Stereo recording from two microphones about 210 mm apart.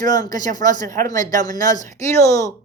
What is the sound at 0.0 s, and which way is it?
Speech, 15° left (ahead or behind).